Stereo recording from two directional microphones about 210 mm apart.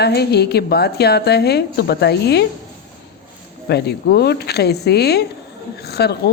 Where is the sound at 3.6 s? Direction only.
50° left (ahead or behind).